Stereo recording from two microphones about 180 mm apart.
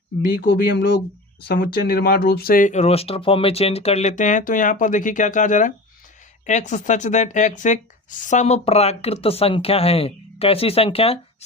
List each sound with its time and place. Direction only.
0.2 s speech: 60° left (ahead or behind); by 11.4 s 35° left (ahead or behind)